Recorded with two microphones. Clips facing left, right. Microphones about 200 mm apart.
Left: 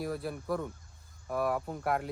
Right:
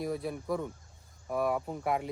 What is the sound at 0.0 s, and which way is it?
Speech, centre (ahead or behind).